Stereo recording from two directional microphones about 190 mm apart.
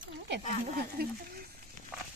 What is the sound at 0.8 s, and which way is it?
Speech, 55° right (ahead or behind).